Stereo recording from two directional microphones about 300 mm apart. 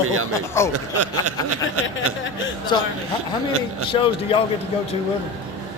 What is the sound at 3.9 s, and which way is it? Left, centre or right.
Speech, centre.